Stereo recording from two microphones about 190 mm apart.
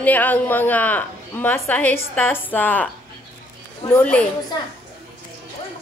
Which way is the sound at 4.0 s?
5° left (ahead or behind).